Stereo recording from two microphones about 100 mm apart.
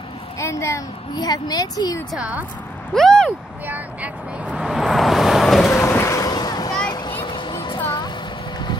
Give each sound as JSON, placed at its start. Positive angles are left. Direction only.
{"t": 0.4, "sound": "a child's voice", "side_deg": 30}
{"t": 1.1, "sound": "speech", "side_deg": 40}
{"t": 2.1, "sound": "speech", "side_deg": -15}
{"t": 2.9, "sound": "speech", "side_deg": 5}
{"t": 3.6, "sound": "speech", "side_deg": -15}
{"t": 4.6, "sound": "vehicle", "side_deg": 0}
{"t": 5.7, "sound": "a sound", "side_deg": 25}